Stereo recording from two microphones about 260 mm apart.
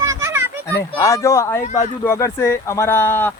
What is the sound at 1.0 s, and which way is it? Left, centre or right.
Speech, centre.